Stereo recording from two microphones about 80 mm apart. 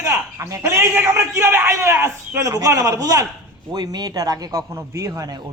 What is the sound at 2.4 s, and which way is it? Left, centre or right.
Speech, right.